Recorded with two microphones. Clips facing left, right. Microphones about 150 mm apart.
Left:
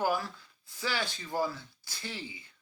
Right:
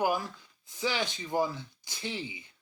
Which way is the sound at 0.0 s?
15° right (ahead or behind).